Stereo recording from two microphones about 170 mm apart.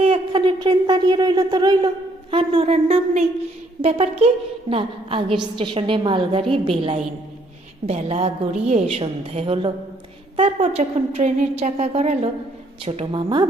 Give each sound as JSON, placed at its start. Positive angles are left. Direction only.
{"t": 0.0, "sound": "a woman's voice", "side_deg": -30}